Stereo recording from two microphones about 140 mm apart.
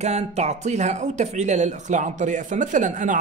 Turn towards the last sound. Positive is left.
turn(degrees=-65)  # may be behind; listen again after turning